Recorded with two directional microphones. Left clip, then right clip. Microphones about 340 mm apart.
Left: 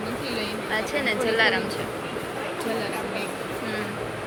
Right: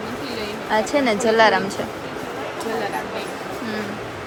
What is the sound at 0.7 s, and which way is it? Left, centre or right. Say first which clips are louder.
Speech: right 7 dB; centre.